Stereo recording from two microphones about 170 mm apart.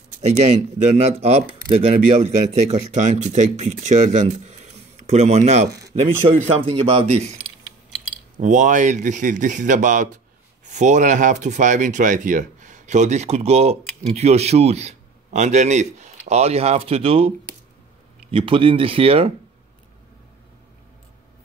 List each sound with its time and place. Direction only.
0.2 s speech: 40° right (ahead or behind)
8.4 s speech: 45° right (ahead or behind)
18.3 s speech: 30° right (ahead or behind)